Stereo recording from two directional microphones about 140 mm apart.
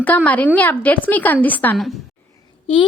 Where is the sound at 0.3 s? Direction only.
10° left (ahead or behind).